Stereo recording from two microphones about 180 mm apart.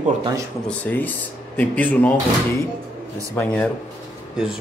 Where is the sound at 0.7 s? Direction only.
10° left (ahead or behind).